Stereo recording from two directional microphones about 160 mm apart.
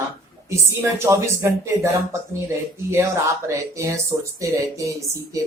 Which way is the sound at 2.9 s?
20° right (ahead or behind).